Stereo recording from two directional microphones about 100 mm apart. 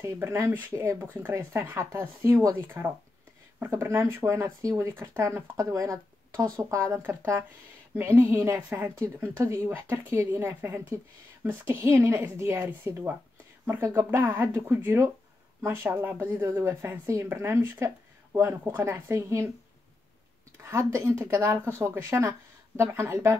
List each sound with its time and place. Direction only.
0.0 s speech: 25° right (ahead or behind)
8.6 s speech: 20° right (ahead or behind)
20.5 s speech: 30° right (ahead or behind)